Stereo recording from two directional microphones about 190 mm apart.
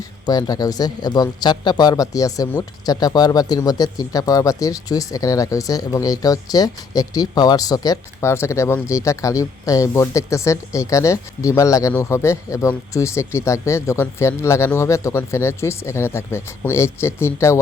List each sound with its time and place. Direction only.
0.3 s speech: 20° left (ahead or behind)